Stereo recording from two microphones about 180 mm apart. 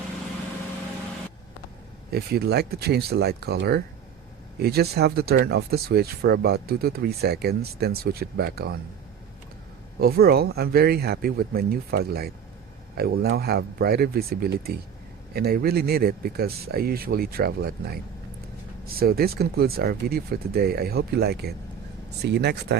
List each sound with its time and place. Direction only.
2.0 s speech: 60° right (ahead or behind)
10.0 s speech: 55° right (ahead or behind)